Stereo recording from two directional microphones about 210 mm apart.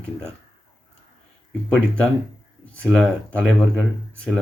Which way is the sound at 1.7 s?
5° left (ahead or behind).